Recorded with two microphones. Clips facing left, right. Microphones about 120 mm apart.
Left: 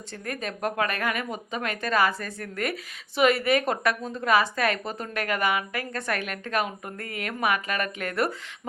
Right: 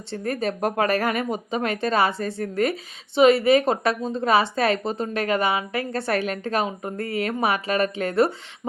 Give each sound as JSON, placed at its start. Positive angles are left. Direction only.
{"t": 0.1, "sound": "a woman's voice", "side_deg": -30}